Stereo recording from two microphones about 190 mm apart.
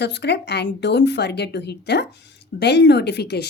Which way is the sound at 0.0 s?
65° left (ahead or behind).